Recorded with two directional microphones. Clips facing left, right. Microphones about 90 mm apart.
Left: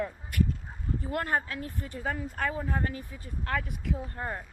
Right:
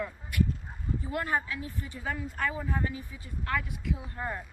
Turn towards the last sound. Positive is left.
turn(degrees=45)  # may be behind; listen again after turning